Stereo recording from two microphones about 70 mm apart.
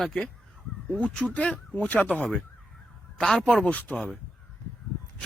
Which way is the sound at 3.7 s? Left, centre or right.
Left.